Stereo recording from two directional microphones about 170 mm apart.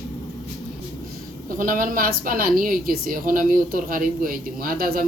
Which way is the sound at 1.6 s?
55° right (ahead or behind).